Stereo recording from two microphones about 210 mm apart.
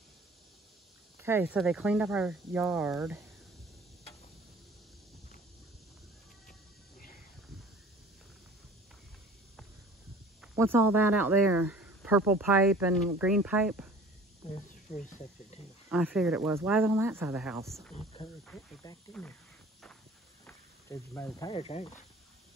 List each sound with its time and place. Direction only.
1.2 s speech: 10° right (ahead or behind)
10.5 s speech: 10° right (ahead or behind)
14.5 s speech: 35° left (ahead or behind)
15.9 s speech: 5° right (ahead or behind)
18.4 s speech: 5° left (ahead or behind)
20.4 s a sound: 10° left (ahead or behind)
21.5 s speech: 25° left (ahead or behind)